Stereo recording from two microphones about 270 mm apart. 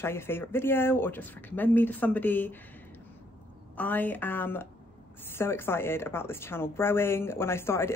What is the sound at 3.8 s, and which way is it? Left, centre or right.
Speech, centre.